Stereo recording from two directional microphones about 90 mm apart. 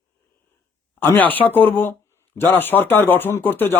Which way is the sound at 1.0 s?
20° left (ahead or behind).